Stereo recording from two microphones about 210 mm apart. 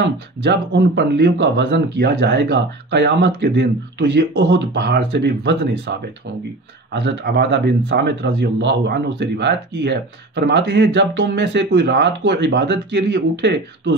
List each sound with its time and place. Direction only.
0.0 s speech: 55° right (ahead or behind)